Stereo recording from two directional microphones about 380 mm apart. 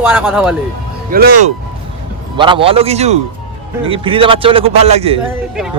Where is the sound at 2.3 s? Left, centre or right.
Centre.